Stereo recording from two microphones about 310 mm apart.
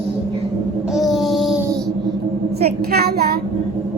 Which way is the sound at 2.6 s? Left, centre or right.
Right.